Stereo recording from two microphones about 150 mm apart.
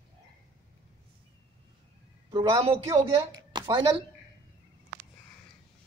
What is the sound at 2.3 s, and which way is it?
A woman's voice, 30° right (ahead or behind).